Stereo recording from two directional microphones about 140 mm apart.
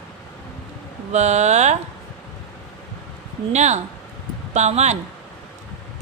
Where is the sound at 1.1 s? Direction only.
55° right (ahead or behind).